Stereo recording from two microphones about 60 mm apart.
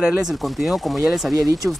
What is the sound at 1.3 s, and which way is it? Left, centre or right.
Speech, right.